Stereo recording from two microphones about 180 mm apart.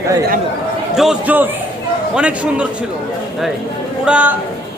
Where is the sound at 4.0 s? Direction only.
5° right (ahead or behind).